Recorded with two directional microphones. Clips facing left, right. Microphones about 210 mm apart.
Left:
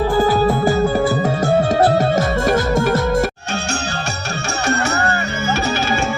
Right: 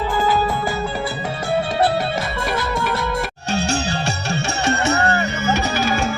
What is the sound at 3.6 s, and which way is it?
Music, 35° right (ahead or behind).